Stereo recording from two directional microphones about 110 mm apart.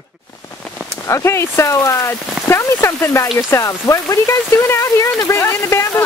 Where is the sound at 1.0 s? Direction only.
25° left (ahead or behind).